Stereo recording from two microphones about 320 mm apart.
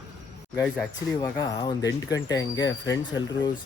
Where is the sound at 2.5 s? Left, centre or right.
Left.